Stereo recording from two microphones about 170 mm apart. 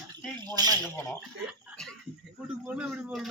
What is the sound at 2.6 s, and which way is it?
Speech, 10° right (ahead or behind).